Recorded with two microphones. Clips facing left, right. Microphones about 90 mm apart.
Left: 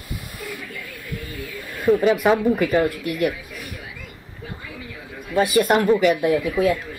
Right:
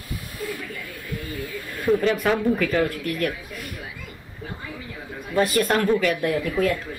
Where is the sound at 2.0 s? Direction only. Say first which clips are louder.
Left 4 dB; 15° left (ahead or behind).